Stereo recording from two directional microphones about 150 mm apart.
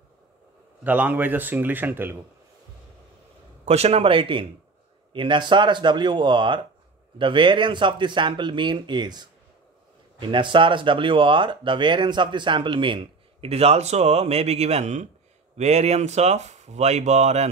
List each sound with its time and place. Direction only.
0.8 s speech: 10° right (ahead or behind)
3.6 s speech: 45° right (ahead or behind)